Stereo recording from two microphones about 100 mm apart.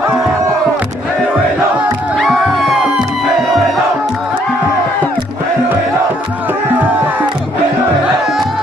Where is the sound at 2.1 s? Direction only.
Centre (ahead or behind).